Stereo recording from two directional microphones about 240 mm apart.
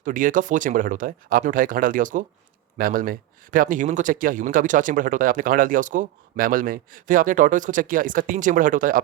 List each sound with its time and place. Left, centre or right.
0.0 s speech: right